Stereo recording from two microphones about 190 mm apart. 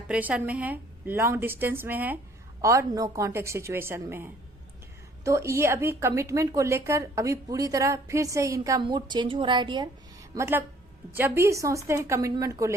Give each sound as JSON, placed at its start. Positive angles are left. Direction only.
{"t": 0.1, "sound": "a woman's voice", "side_deg": -5}